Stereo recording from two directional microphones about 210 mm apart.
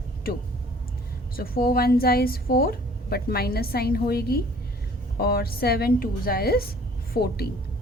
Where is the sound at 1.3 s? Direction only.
45° left (ahead or behind).